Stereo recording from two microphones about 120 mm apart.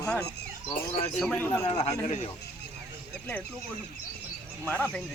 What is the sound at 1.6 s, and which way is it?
Speech, 60° left (ahead or behind).